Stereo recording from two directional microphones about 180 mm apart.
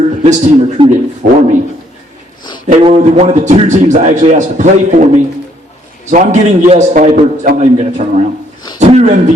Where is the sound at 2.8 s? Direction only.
35° right (ahead or behind).